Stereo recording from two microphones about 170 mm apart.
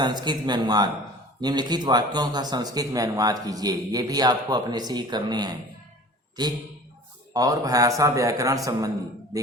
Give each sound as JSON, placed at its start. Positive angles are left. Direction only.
{"t": 0.0, "sound": "a man's voice", "side_deg": -25}